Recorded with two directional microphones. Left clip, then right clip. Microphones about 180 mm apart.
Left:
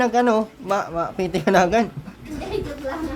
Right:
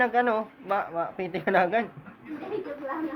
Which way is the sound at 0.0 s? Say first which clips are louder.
Left 5 dB; 35° left (ahead or behind).